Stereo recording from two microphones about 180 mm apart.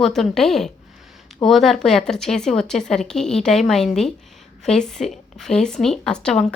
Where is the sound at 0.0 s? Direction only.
Centre (ahead or behind).